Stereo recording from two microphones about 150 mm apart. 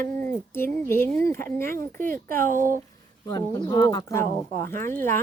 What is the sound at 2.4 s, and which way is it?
Speech, 65° right (ahead or behind).